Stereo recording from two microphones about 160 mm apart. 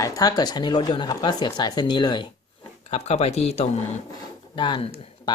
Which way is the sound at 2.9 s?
40° left (ahead or behind).